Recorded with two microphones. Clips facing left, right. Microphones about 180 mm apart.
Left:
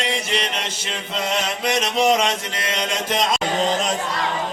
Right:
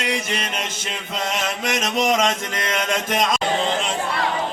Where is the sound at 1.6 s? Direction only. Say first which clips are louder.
Left 2 dB; 45° right (ahead or behind).